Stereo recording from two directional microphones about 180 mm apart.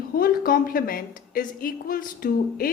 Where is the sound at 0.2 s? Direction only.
55° left (ahead or behind).